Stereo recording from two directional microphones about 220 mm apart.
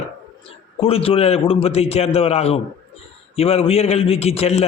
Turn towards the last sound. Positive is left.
turn(degrees=30)  # may be behind; listen again after turning